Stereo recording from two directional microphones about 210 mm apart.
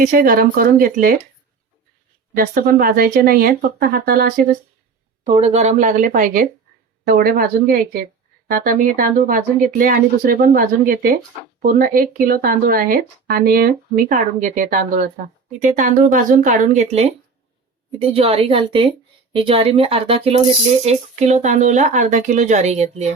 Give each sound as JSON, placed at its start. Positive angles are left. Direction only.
{"t": 0.0, "sound": "speech", "side_deg": -45}
{"t": 2.3, "sound": "speech", "side_deg": -40}
{"t": 5.3, "sound": "a woman's voice", "side_deg": -30}